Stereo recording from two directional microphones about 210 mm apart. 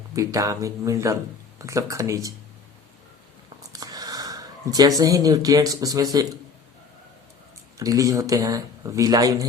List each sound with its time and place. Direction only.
0.1 s speech: 15° right (ahead or behind)
3.7 s speech: 20° right (ahead or behind)
7.8 s speech: 15° right (ahead or behind)